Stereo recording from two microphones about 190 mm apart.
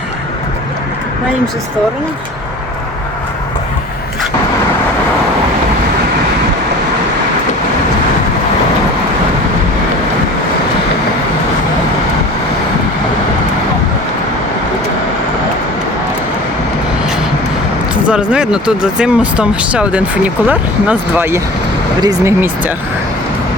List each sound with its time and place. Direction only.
17.9 s speech: 5° right (ahead or behind)